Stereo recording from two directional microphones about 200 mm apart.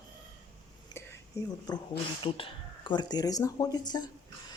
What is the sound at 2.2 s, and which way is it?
Speech, 25° left (ahead or behind).